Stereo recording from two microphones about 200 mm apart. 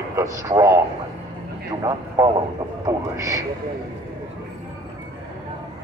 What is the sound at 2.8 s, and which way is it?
Speech, 15° right (ahead or behind).